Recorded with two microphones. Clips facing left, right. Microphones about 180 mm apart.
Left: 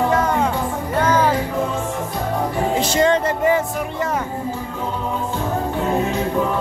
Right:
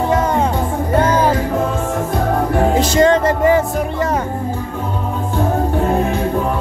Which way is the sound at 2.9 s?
45° right (ahead or behind).